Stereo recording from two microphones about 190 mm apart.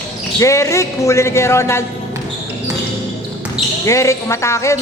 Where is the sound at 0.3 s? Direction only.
15° left (ahead or behind).